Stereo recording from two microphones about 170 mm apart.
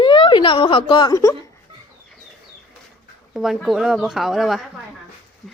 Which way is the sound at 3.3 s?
Centre (ahead or behind).